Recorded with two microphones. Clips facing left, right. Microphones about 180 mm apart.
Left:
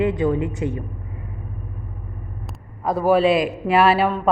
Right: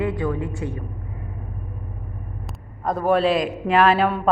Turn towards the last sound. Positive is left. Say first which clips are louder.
# left 1 dB
turn(degrees=5)  # may be behind; listen again after turning